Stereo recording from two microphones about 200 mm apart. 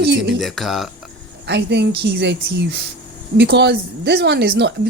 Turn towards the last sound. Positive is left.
turn(degrees=-55)  # may be behind; listen again after turning